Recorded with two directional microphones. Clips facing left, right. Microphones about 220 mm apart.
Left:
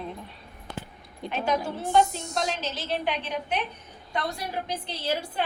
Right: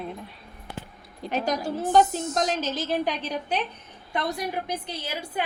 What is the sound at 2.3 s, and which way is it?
A woman's voice, 45° right (ahead or behind).